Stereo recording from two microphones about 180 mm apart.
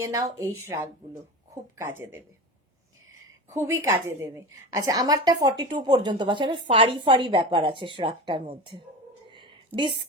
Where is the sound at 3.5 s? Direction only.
15° right (ahead or behind).